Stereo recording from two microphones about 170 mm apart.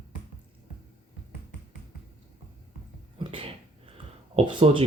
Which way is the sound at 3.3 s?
30° right (ahead or behind).